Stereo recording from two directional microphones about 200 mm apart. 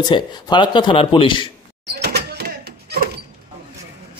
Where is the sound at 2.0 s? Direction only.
55° right (ahead or behind).